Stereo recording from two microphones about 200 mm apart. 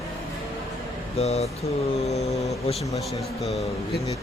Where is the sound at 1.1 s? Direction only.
30° left (ahead or behind).